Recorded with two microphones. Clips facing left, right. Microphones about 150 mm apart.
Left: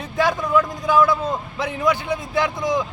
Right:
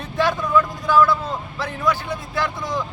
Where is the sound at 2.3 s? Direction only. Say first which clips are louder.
Left 4 dB; 15° left (ahead or behind).